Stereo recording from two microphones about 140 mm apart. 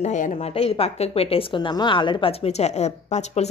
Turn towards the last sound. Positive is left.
turn(degrees=55)  # may be behind; listen again after turning